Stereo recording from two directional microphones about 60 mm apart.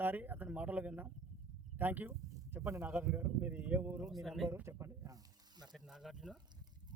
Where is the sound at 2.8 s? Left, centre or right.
Right.